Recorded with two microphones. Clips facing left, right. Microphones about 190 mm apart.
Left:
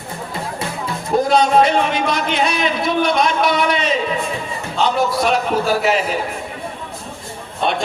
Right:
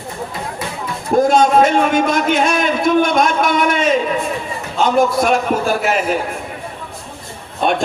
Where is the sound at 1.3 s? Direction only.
50° right (ahead or behind).